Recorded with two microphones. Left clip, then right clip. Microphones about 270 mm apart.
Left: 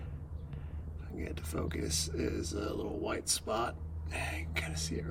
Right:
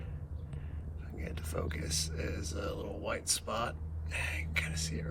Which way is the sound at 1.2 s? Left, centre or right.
Left.